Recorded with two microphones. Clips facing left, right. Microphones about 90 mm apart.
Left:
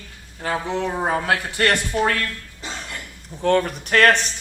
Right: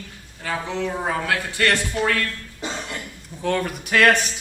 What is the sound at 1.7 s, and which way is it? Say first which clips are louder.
Speech: left 2 dB; 15° left (ahead or behind).